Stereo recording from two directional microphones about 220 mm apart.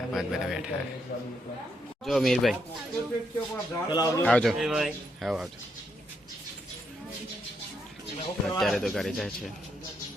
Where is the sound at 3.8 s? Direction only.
20° left (ahead or behind).